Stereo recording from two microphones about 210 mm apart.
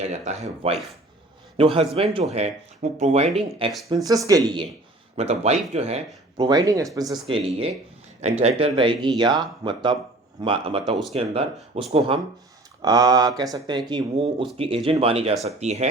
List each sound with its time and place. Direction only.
0.0 s speech: 30° right (ahead or behind)
4.0 s speech: 15° right (ahead or behind)
5.1 s speech: 30° right (ahead or behind)
6.3 s speech: 20° right (ahead or behind)
12.8 s speech: 15° right (ahead or behind)